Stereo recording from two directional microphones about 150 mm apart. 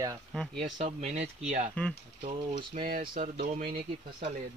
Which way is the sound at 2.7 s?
65° right (ahead or behind).